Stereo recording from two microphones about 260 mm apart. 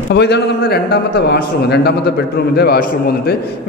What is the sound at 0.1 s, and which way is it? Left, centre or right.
A man's voice, left.